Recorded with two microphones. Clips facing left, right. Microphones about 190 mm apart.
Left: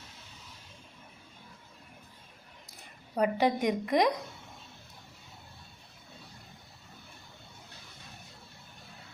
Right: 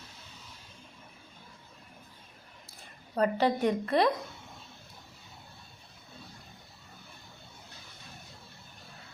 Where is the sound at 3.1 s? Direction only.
15° left (ahead or behind).